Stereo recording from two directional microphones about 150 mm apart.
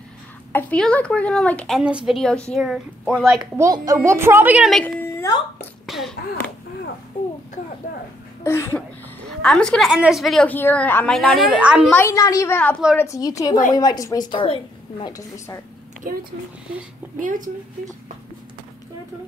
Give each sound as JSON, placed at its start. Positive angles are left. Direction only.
{"t": 0.5, "sound": "a woman's voice", "side_deg": 15}
{"t": 1.8, "sound": "a woman's voice", "side_deg": -5}
{"t": 3.3, "sound": "a woman's voice", "side_deg": -25}
{"t": 4.6, "sound": "a woman's voice", "side_deg": 5}
{"t": 5.0, "sound": "a sound", "side_deg": 15}
{"t": 5.9, "sound": "a sound", "side_deg": 0}
{"t": 8.5, "sound": "speech", "side_deg": 15}
{"t": 9.4, "sound": "a woman's voice", "side_deg": 5}
{"t": 11.6, "sound": "a woman's voice", "side_deg": -5}
{"t": 11.9, "sound": "a woman's voice", "side_deg": 20}
{"t": 14.3, "sound": "a woman's voice", "side_deg": 35}
{"t": 15.1, "sound": "a woman's voice", "side_deg": 20}
{"t": 16.0, "sound": "speech", "side_deg": -75}